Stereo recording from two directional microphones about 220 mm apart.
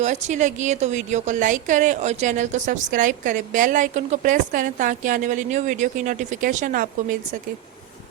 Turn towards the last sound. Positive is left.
turn(degrees=-40)  # may be behind; listen again after turning